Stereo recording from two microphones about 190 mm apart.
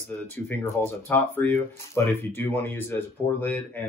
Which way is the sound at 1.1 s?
10° left (ahead or behind).